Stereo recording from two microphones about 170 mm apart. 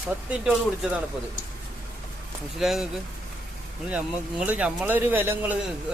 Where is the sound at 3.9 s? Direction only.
10° right (ahead or behind).